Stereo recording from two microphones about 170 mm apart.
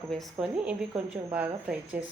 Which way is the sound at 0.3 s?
5° right (ahead or behind).